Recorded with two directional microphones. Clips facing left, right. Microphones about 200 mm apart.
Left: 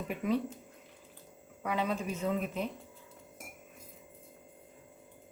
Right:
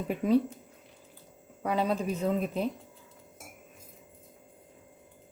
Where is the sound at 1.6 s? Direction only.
35° right (ahead or behind).